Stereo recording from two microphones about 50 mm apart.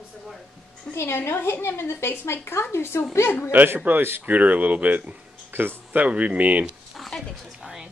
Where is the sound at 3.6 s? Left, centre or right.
Right.